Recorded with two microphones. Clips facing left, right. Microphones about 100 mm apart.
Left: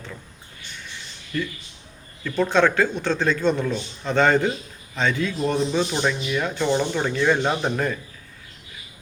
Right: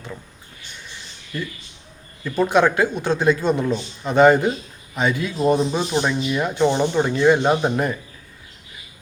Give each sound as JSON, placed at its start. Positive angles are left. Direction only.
{"t": 1.3, "sound": "speech", "side_deg": -20}